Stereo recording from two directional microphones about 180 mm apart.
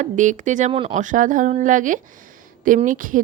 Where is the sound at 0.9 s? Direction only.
45° right (ahead or behind).